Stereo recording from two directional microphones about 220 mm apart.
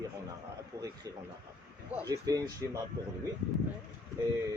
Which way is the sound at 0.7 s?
20° right (ahead or behind).